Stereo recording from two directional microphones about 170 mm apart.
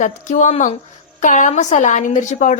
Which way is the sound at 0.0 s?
45° left (ahead or behind).